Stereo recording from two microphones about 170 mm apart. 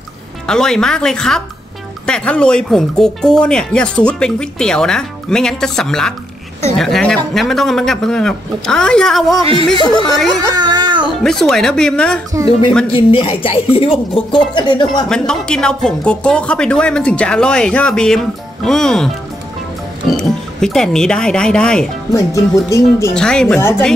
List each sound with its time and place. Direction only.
0.5 s speech: 5° left (ahead or behind)
9.8 s speech: 30° left (ahead or behind)
10.0 s speech: centre (ahead or behind)
10.5 s baby cry: 25° right (ahead or behind)
11.1 s speech: centre (ahead or behind)
12.9 s a woman's voice: 30° left (ahead or behind)
15.0 s speech: 5° left (ahead or behind)
20.1 s speech: centre (ahead or behind)
22.1 s music: 20° left (ahead or behind)
23.1 s speech: 5° left (ahead or behind)